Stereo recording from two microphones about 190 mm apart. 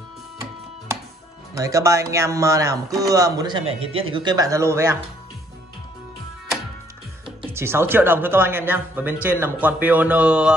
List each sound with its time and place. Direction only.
1.6 s speech: 15° right (ahead or behind)
7.5 s speech: 15° right (ahead or behind)